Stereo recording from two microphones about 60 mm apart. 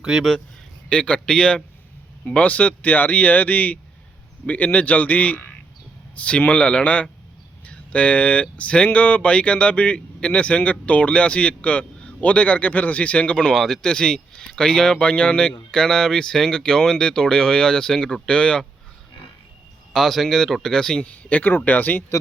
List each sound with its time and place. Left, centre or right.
0.0 s a man's voice: centre
0.9 s speech: centre
19.9 s speech: centre
21.0 s speech: left